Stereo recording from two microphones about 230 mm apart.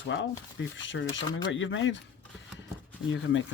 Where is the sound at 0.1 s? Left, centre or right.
Left.